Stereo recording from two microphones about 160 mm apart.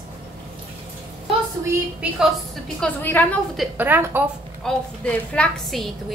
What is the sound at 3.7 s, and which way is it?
Speech, 10° right (ahead or behind).